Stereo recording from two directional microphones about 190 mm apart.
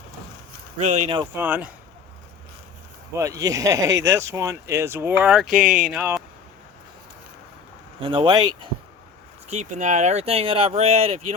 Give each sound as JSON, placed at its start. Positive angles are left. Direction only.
{"t": 0.8, "sound": "speech", "side_deg": -40}
{"t": 1.3, "sound": "speech", "side_deg": -10}
{"t": 3.2, "sound": "speech", "side_deg": -15}
{"t": 8.0, "sound": "speech", "side_deg": -25}
{"t": 9.5, "sound": "speech", "side_deg": -40}